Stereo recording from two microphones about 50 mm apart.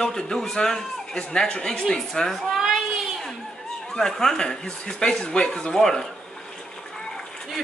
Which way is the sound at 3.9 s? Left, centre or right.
Centre.